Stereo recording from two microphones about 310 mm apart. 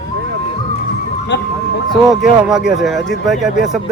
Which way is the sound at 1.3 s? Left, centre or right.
Left.